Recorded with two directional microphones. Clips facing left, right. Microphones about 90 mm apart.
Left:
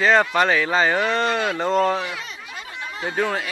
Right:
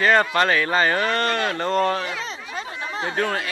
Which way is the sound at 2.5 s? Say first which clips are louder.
Right 4 dB; 30° right (ahead or behind).